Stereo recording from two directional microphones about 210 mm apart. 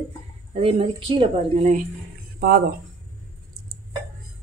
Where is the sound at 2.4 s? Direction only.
45° right (ahead or behind).